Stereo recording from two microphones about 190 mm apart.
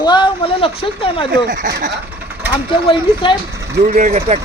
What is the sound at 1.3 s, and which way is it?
Speech, 70° right (ahead or behind).